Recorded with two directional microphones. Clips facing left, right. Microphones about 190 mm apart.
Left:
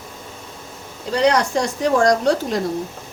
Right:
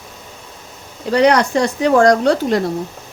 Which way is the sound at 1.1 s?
65° right (ahead or behind).